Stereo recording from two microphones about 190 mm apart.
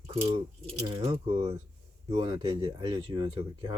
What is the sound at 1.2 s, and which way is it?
Speech, 30° right (ahead or behind).